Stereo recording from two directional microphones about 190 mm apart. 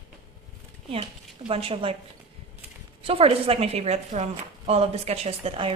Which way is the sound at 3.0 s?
30° right (ahead or behind).